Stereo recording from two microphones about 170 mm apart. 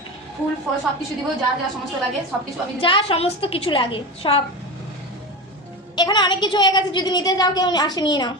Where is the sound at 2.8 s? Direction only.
30° left (ahead or behind).